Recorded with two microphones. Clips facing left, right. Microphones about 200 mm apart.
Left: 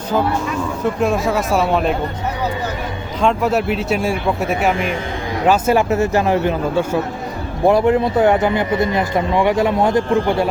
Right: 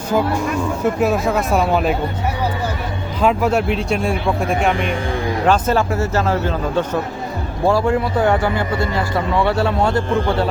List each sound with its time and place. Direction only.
0.8 s speech: 5° right (ahead or behind)
3.2 s a man's voice: centre (ahead or behind)